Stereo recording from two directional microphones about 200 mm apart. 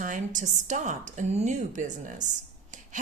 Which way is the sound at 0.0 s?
40° right (ahead or behind).